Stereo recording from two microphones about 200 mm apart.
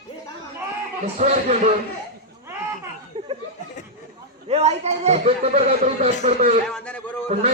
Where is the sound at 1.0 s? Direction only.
35° right (ahead or behind).